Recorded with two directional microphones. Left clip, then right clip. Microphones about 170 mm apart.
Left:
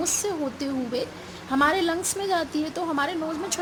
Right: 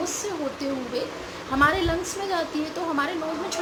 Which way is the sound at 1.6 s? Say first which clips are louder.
Right 1 dB; 50° left (ahead or behind).